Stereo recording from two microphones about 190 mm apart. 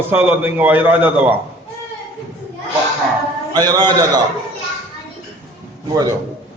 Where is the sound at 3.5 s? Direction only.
20° right (ahead or behind).